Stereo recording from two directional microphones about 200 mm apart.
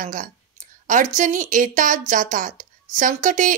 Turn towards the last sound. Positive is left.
turn(degrees=-40)  # may be behind; listen again after turning